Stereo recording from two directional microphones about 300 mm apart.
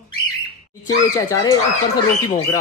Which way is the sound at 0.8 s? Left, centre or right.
Centre.